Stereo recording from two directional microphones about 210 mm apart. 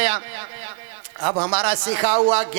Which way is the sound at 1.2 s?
25° right (ahead or behind).